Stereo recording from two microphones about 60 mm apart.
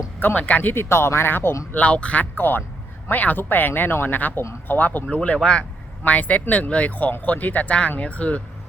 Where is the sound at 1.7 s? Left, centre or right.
Left.